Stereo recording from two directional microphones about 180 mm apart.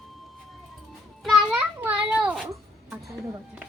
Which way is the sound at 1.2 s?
5° right (ahead or behind).